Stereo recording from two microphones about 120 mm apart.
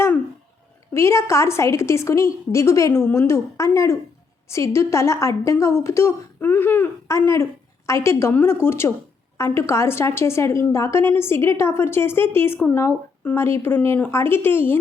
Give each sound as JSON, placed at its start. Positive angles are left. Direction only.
{"t": 0.9, "sound": "a woman's voice", "side_deg": 25}